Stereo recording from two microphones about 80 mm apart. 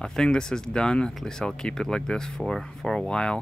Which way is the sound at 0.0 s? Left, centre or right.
Centre.